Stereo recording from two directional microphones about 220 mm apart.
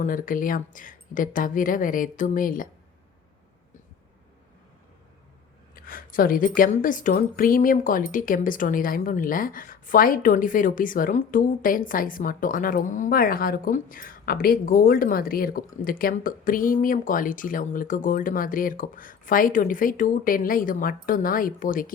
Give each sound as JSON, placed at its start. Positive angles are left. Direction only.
{"t": 0.0, "sound": "a woman's voice", "side_deg": 40}
{"t": 5.7, "sound": "a woman's voice", "side_deg": 40}